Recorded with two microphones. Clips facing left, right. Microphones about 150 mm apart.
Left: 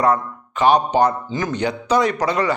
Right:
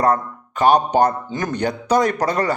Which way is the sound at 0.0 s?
45° right (ahead or behind).